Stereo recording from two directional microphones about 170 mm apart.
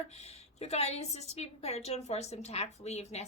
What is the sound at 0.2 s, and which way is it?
A woman's voice, 40° left (ahead or behind).